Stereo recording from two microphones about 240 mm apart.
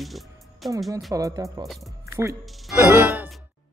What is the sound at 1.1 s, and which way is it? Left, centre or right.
Speech, centre.